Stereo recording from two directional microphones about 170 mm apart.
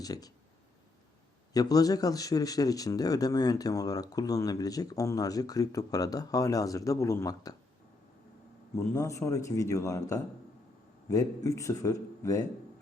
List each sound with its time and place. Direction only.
0.0 s speech: 20° left (ahead or behind)
1.5 s speech: 20° left (ahead or behind)
8.7 s speech: 15° left (ahead or behind)